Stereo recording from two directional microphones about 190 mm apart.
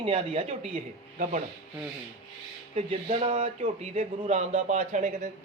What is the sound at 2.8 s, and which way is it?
Speech, 35° right (ahead or behind).